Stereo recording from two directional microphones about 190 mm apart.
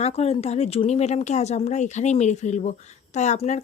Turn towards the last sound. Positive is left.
turn(degrees=35)  # may be behind; listen again after turning